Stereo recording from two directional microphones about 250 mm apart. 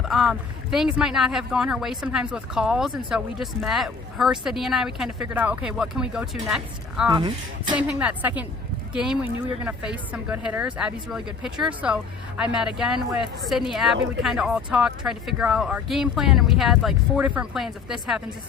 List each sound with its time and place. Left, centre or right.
0.1 s speech: centre
7.1 s speech: centre
7.8 s speech: centre